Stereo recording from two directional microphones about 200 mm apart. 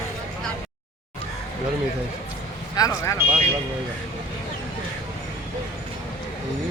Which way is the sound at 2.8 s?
15° left (ahead or behind).